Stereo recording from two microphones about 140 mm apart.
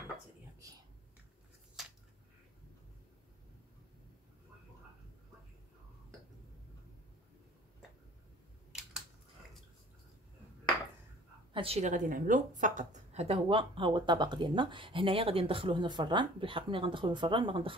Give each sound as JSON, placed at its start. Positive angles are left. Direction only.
{"t": 11.5, "sound": "a woman's voice", "side_deg": -45}